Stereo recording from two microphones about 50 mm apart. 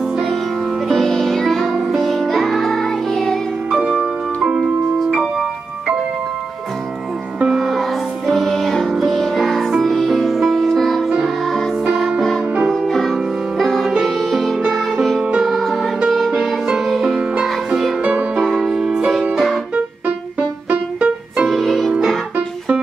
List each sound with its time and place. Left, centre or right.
0.8 s music: centre
3.7 s music: centre
7.4 s music: centre
11.8 s music: centre
15.5 s music: centre
16.6 s music: centre
18.0 s music: right; by 19.6 s centre
19.7 s music: right
21.5 s music: centre